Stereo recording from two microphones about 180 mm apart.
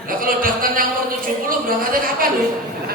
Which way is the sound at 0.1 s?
50° right (ahead or behind).